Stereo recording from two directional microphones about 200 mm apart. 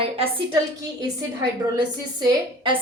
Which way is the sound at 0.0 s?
30° right (ahead or behind).